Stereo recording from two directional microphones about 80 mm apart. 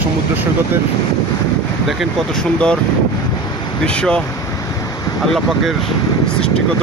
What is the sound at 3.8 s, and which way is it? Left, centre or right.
Speech, centre.